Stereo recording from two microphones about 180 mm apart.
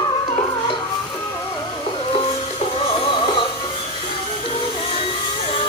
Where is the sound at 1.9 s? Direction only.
30° left (ahead or behind).